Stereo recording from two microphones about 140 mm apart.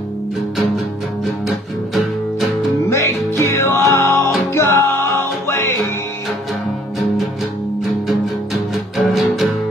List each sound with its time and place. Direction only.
2.9 s music: 20° left (ahead or behind)
8.9 s music: centre (ahead or behind)